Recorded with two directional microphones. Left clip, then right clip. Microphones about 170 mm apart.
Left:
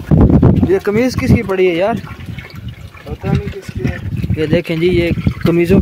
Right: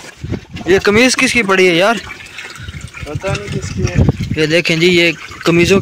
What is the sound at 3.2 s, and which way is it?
Speech, 45° right (ahead or behind).